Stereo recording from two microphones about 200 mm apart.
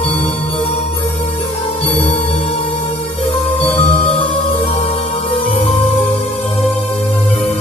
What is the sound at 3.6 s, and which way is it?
Music, 10° left (ahead or behind).